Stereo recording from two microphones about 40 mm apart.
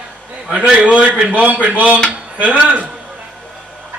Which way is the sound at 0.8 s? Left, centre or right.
Right.